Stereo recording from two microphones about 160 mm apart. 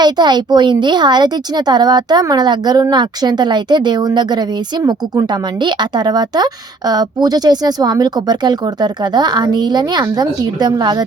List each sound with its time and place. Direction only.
0.0 s speech: 25° right (ahead or behind)